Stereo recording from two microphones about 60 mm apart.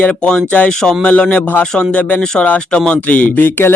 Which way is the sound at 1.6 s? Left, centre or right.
Centre.